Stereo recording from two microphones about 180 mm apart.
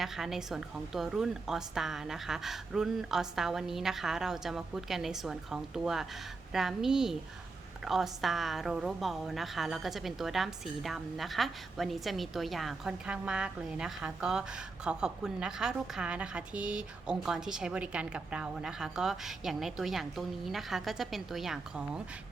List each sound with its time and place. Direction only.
0.0 s a woman's voice: centre (ahead or behind)